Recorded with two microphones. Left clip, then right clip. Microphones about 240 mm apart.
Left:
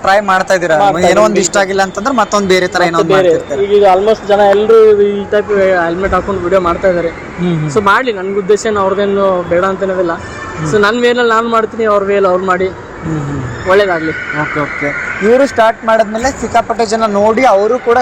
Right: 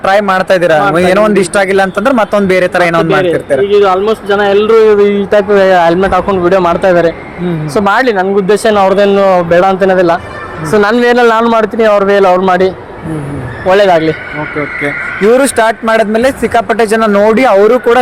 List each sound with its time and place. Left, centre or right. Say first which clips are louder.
0.0 s a man's voice: right 1 dB; right
15.4 s speech: right 1 dB; right